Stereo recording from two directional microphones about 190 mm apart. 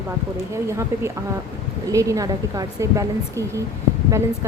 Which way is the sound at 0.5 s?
15° right (ahead or behind).